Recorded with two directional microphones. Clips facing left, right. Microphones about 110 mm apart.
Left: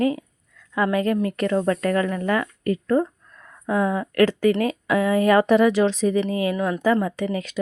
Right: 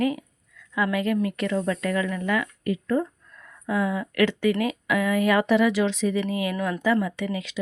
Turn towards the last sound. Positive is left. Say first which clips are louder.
# left 4 dB
turn(degrees=45)  # may be behind; listen again after turning